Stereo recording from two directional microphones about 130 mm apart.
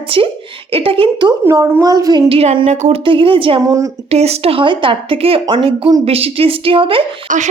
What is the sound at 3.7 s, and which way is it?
Speech, 25° right (ahead or behind).